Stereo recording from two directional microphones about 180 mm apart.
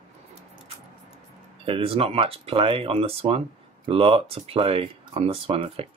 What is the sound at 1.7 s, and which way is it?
Speech, 30° right (ahead or behind).